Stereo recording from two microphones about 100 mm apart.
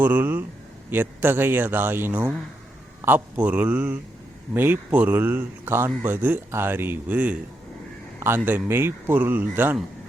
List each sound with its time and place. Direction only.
0.0 s a man's voice: 20° right (ahead or behind)
8.4 s speech: 20° right (ahead or behind)